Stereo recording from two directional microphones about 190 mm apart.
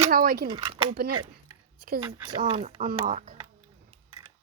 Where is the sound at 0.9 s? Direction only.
55° right (ahead or behind).